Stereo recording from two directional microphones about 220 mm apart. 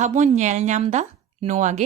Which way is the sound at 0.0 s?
35° right (ahead or behind).